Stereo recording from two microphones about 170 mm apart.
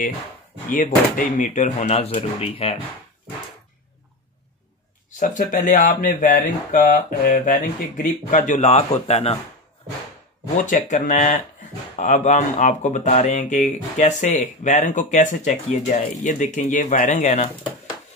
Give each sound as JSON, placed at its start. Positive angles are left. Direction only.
{"t": 0.7, "sound": "speech", "side_deg": 55}
{"t": 5.2, "sound": "speech", "side_deg": 45}
{"t": 10.6, "sound": "speech", "side_deg": 50}